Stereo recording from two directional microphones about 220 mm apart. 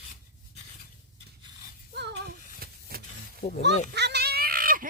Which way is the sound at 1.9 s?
50° right (ahead or behind).